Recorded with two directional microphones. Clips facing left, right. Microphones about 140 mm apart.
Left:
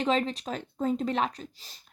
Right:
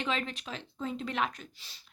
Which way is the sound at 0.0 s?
35° left (ahead or behind).